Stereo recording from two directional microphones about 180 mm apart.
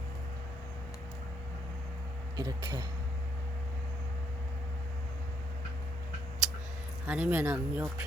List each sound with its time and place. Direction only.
2.3 s speech: 25° right (ahead or behind)
7.1 s speech: 10° right (ahead or behind)